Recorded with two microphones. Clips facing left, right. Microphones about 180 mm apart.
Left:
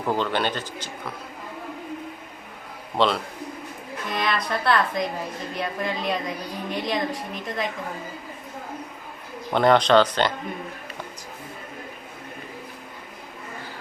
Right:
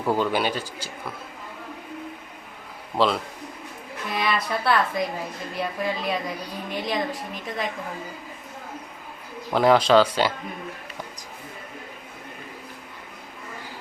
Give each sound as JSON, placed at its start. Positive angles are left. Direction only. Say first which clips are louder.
{"t": 0.1, "sound": "speech", "louder": "right 1 dB", "side_deg": -10}
{"t": 3.0, "sound": "a woman's voice", "louder": "even", "side_deg": -5}
{"t": 9.5, "sound": "a woman's voice", "louder": "even", "side_deg": -5}